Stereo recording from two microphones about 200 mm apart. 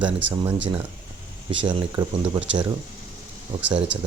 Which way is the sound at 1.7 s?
25° right (ahead or behind).